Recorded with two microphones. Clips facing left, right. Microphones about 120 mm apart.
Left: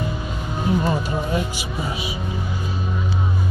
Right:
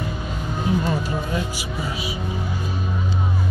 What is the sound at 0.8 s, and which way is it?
Speech, 25° left (ahead or behind).